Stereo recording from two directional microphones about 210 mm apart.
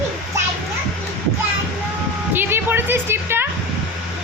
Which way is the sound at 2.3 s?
10° right (ahead or behind).